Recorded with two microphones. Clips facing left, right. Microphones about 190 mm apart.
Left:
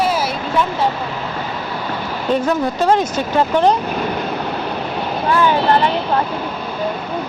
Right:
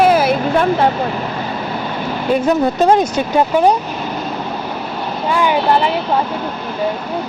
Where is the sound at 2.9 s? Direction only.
10° right (ahead or behind).